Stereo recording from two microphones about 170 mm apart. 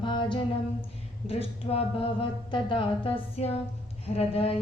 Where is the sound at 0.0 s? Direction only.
30° left (ahead or behind).